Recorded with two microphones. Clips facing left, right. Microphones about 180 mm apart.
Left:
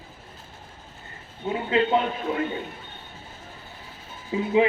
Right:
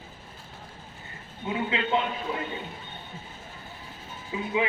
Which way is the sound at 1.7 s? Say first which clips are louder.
Left 7 dB; 40° left (ahead or behind).